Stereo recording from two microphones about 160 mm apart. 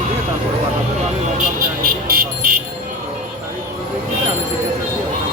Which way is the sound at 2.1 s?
65° right (ahead or behind).